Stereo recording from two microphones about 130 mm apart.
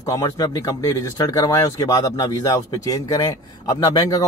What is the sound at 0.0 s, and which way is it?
Speech, 30° left (ahead or behind).